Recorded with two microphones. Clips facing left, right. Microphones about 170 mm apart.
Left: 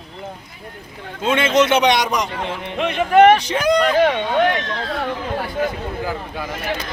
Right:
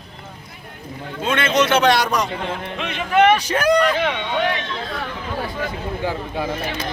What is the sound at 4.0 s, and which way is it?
Speech, 45° left (ahead or behind).